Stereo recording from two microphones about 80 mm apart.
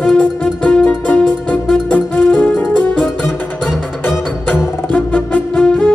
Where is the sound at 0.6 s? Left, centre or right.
Left.